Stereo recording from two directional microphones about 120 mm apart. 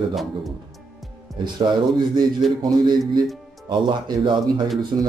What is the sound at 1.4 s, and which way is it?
Speech, 40° right (ahead or behind).